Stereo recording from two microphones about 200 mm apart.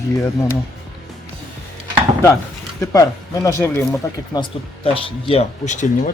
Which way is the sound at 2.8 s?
15° left (ahead or behind).